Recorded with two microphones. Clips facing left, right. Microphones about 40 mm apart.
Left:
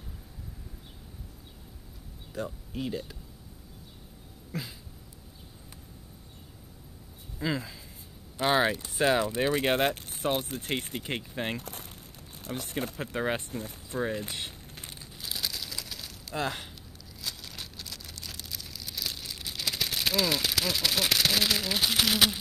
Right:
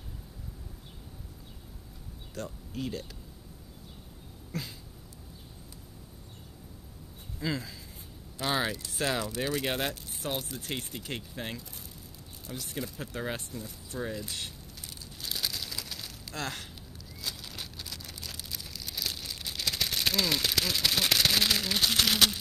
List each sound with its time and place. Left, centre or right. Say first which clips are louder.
2.3 s speech: left 3 dB; centre
4.5 s cat: left 1 dB; centre
7.3 s speech: left 2 dB; centre
9.9 s a sound: left 1 dB; left
10.2 s speech: left 5 dB; left
11.6 s speech: left 5 dB; left
13.5 s speech: left 4 dB; left
14.8 s crumpling: left 2 dB; left
15.1 s crushing: even; centre
16.3 s speech: left 5 dB; centre
17.2 s vehicle: even; centre
18.2 s a sound: left 1 dB; centre